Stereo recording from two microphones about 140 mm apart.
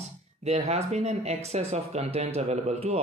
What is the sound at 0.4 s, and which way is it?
Speech, 50° right (ahead or behind).